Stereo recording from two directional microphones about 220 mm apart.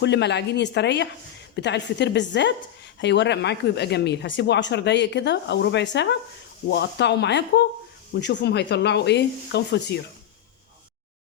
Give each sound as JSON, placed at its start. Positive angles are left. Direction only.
{"t": 0.0, "sound": "a woman's voice", "side_deg": 50}